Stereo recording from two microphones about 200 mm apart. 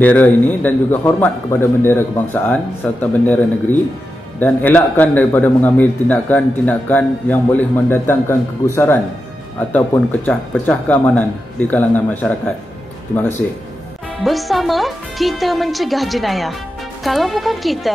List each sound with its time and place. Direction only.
0.0 s a man's voice: 10° left (ahead or behind)
4.4 s a man's voice: 10° left (ahead or behind)
14.2 s speech: centre (ahead or behind)